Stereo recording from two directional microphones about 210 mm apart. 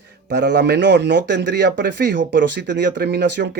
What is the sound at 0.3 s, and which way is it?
A man's voice, 50° right (ahead or behind).